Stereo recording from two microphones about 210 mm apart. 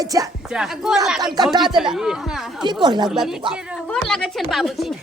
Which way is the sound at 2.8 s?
20° right (ahead or behind).